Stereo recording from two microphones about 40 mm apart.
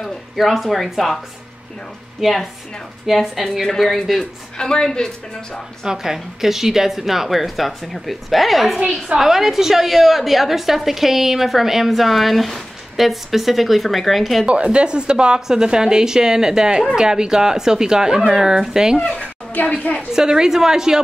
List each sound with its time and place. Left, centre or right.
0.0 s a woman's voice: centre
2.2 s a woman's voice: centre
4.2 s speech: centre
5.9 s a woman's voice: centre
14.4 s a woman's voice: right
19.6 s a woman's voice: left
20.1 s speech: centre